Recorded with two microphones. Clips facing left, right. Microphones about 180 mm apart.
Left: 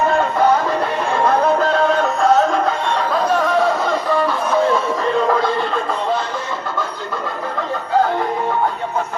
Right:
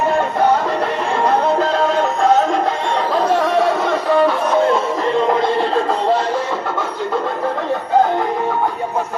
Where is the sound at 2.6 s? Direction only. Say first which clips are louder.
Right 1 dB; 25° right (ahead or behind).